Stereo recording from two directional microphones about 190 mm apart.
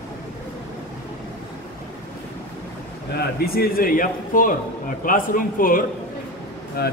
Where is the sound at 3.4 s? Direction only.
55° left (ahead or behind).